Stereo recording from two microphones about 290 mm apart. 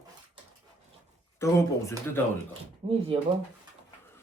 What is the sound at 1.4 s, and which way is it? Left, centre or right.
Speech, centre.